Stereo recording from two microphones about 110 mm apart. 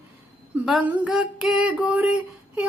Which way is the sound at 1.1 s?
5° right (ahead or behind).